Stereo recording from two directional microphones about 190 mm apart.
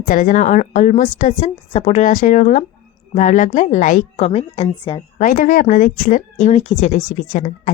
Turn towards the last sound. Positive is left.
turn(degrees=45)  # may be behind; listen again after turning